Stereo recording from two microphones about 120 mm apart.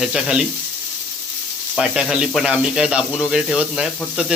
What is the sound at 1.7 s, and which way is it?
Speech, 5° right (ahead or behind).